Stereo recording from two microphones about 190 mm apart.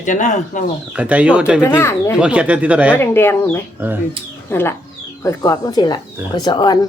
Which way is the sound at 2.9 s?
10° left (ahead or behind).